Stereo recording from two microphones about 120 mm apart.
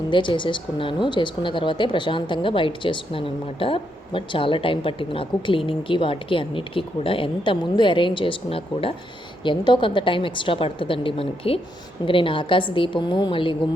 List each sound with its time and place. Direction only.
0.1 s speech: 40° left (ahead or behind)
9.4 s speech: 40° left (ahead or behind)